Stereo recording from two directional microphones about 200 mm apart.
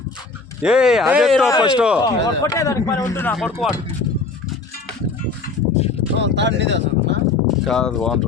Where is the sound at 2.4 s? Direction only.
15° left (ahead or behind).